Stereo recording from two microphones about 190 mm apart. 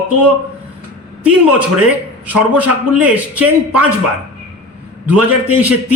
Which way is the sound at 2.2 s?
10° right (ahead or behind).